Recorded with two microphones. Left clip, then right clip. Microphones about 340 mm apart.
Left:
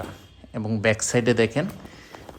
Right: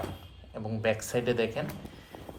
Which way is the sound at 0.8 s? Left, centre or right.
Centre.